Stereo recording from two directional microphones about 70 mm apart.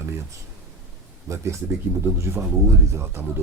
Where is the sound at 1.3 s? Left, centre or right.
Right.